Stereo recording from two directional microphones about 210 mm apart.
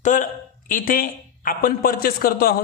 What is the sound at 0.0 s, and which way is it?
A man's voice, 35° left (ahead or behind).